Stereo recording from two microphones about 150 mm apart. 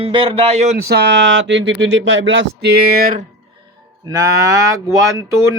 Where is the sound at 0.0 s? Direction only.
40° right (ahead or behind).